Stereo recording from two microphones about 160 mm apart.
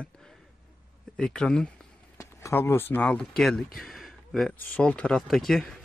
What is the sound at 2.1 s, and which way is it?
Speech, 15° left (ahead or behind).